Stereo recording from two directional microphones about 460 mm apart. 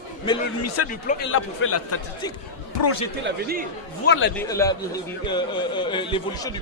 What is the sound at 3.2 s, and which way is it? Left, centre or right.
Speech, centre.